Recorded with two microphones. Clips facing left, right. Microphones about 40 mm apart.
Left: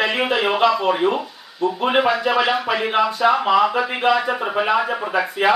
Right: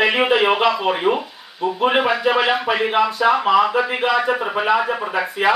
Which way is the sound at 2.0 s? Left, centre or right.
Centre.